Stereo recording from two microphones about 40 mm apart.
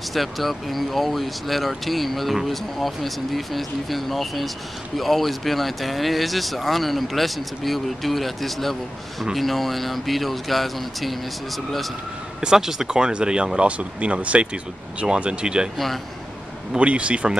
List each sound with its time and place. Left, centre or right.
0.1 s speech: centre
12.4 s speech: centre
16.7 s speech: right